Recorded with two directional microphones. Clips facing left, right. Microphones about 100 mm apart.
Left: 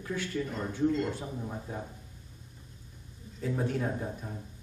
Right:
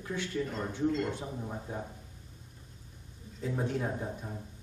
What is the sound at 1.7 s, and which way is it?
Speech, 15° right (ahead or behind).